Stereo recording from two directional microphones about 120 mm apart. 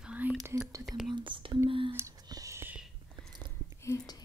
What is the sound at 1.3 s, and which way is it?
Speech, 45° right (ahead or behind).